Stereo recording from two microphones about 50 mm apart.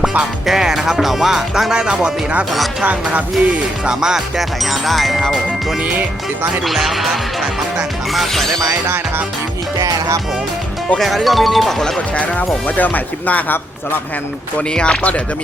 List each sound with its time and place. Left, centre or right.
0.4 s music: centre
1.7 s music: centre
2.8 s music: right
3.8 s music: centre
4.6 s speech: centre
6.7 s speech: centre
11.0 s speech: centre
12.1 s speech: left
14.8 s speech: left